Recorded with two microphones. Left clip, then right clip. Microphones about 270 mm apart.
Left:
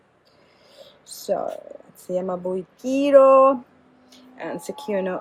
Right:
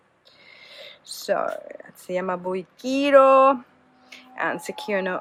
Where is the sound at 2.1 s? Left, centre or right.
Centre.